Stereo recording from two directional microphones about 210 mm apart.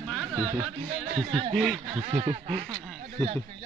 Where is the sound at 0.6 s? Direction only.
Centre (ahead or behind).